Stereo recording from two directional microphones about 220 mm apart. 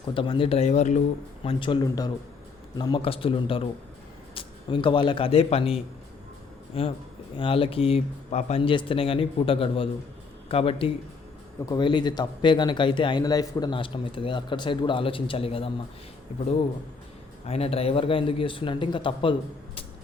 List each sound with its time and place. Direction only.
0.0 s a man's voice: 25° left (ahead or behind)
17.4 s speech: 25° left (ahead or behind)